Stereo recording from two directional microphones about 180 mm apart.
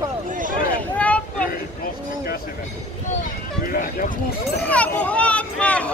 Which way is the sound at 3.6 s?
50° left (ahead or behind).